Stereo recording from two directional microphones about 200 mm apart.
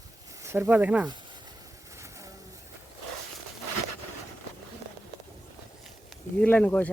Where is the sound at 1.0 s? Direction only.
20° right (ahead or behind).